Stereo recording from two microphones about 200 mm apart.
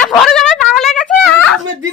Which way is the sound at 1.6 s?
70° right (ahead or behind).